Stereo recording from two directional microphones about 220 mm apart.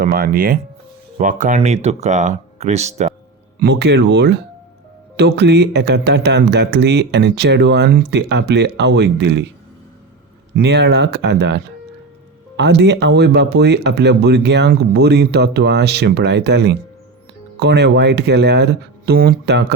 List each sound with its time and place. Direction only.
0.0 s speech: 40° right (ahead or behind)
3.6 s speech: 50° right (ahead or behind)
10.5 s speech: 50° right (ahead or behind)